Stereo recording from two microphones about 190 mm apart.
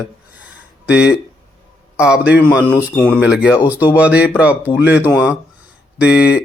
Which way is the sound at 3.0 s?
5° left (ahead or behind).